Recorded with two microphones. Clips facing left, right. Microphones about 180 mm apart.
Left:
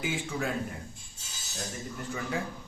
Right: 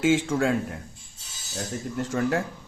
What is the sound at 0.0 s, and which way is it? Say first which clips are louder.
Speech: right 11 dB; 90° right.